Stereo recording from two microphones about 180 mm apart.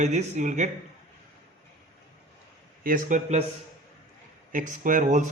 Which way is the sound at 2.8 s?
50° right (ahead or behind).